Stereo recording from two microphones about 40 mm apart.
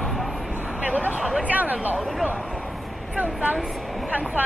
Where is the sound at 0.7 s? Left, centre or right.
Right.